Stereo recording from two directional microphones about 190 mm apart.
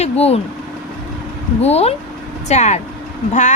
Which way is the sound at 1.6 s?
35° left (ahead or behind).